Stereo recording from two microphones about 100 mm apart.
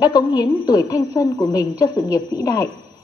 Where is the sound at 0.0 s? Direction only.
45° left (ahead or behind).